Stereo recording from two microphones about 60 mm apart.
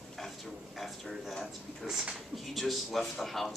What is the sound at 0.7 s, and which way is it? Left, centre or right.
Speech, centre.